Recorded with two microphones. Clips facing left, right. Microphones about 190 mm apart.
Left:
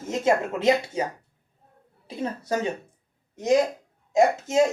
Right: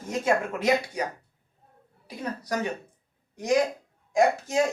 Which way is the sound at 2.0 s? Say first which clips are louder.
Left 4 dB; 25° left (ahead or behind).